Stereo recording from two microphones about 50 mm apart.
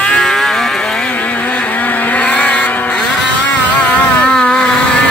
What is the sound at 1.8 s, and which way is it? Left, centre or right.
Vehicle, left.